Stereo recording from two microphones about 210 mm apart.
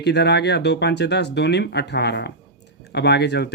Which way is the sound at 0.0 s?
55° left (ahead or behind).